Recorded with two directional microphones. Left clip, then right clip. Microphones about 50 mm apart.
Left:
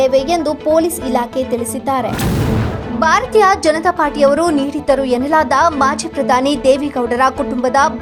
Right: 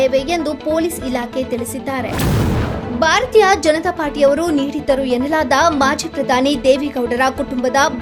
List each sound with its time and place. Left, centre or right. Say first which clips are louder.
0.0 s a woman's voice: left 3 dB; left
3.0 s a woman's voice: left 1 dB; centre
4.5 s a woman's voice: left 2 dB; left
5.3 s a woman's voice: left 2 dB; centre